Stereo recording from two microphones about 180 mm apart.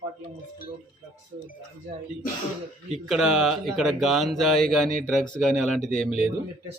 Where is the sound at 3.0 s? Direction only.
Centre (ahead or behind).